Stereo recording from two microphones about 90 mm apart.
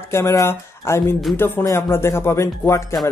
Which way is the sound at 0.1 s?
30° left (ahead or behind).